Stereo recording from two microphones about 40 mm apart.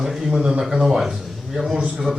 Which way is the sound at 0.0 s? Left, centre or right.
Centre.